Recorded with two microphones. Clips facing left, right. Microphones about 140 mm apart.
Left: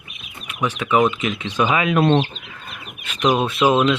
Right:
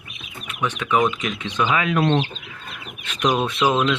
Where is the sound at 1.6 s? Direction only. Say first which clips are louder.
Left 3 dB; 15° left (ahead or behind).